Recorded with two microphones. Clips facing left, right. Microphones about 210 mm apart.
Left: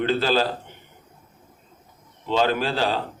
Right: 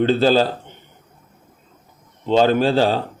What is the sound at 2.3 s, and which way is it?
Speech, 35° right (ahead or behind).